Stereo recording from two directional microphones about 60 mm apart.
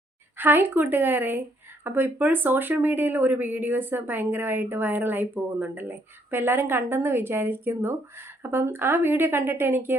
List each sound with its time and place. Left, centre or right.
0.3 s a woman's voice: right